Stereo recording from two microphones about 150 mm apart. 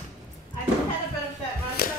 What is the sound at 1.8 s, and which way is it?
Music, 80° left.